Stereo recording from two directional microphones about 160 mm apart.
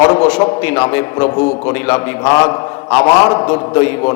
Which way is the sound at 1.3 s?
25° left (ahead or behind).